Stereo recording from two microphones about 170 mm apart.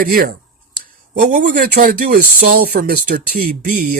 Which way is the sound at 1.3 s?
55° right (ahead or behind).